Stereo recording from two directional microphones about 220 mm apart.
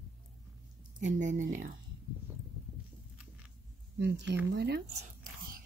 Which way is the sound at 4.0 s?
50° right (ahead or behind).